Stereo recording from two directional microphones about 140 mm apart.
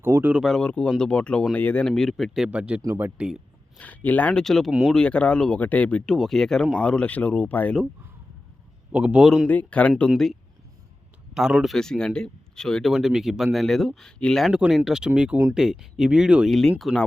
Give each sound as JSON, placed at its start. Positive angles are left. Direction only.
{"t": 0.0, "sound": "a man's voice", "side_deg": -15}
{"t": 0.4, "sound": "speech", "side_deg": 5}
{"t": 3.2, "sound": "speech", "side_deg": -5}
{"t": 3.8, "sound": "speech", "side_deg": 10}
{"t": 8.9, "sound": "a man's voice", "side_deg": -10}
{"t": 9.5, "sound": "speech", "side_deg": 10}
{"t": 11.3, "sound": "speech", "side_deg": -5}